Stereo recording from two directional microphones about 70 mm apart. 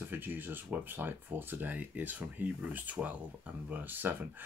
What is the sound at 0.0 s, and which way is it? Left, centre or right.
Speech, right.